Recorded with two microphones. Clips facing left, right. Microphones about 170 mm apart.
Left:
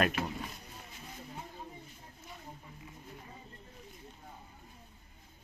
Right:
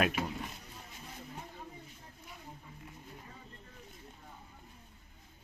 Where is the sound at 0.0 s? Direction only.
5° right (ahead or behind).